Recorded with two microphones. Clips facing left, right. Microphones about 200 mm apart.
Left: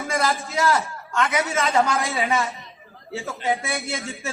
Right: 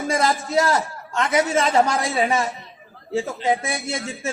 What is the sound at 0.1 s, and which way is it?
A man's voice, 30° right (ahead or behind).